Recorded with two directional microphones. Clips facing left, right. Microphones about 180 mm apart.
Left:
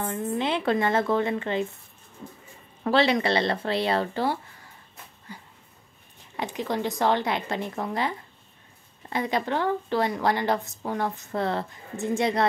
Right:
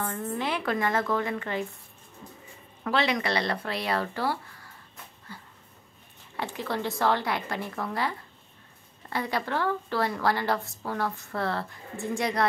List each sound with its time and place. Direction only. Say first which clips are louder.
0.0 s a woman's voice: left 3 dB; 20° left (ahead or behind)
2.8 s a woman's voice: left 5 dB; 30° left (ahead or behind)
5.3 s a sound: left 2 dB; 20° left (ahead or behind)
6.3 s a woman's voice: left 3 dB; 20° left (ahead or behind)